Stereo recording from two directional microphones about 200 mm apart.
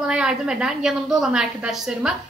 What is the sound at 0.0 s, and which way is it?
A woman's voice, 5° right (ahead or behind).